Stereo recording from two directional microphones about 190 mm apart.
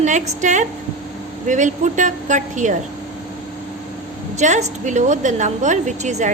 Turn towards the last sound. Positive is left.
turn(degrees=-40)  # may be behind; listen again after turning